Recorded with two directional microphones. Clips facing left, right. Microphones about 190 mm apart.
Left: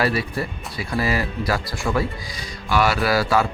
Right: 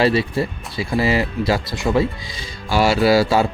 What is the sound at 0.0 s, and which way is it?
Speech, 25° right (ahead or behind).